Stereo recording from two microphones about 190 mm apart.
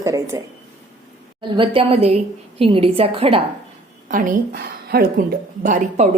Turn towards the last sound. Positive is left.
turn(degrees=-40)  # may be behind; listen again after turning